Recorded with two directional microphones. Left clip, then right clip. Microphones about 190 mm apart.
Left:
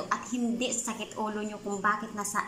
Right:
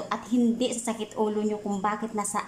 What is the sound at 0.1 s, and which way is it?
A woman's voice, 20° right (ahead or behind).